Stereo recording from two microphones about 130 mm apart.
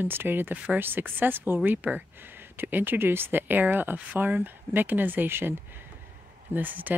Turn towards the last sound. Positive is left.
turn(degrees=-15)  # may be behind; listen again after turning